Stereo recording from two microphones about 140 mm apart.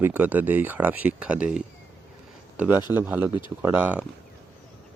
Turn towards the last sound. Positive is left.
turn(degrees=-10)  # may be behind; listen again after turning